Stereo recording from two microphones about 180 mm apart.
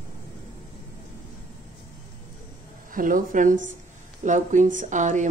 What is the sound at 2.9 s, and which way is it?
Speech, 50° right (ahead or behind).